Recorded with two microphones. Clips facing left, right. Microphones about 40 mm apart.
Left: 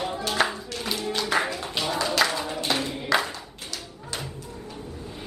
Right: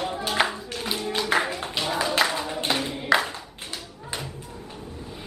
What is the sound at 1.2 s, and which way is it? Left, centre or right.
Music, centre.